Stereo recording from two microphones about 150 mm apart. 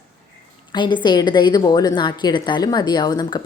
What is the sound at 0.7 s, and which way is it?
A woman's voice, 30° left (ahead or behind).